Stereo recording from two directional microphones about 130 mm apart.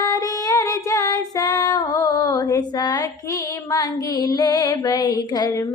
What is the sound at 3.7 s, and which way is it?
Music, 30° left (ahead or behind).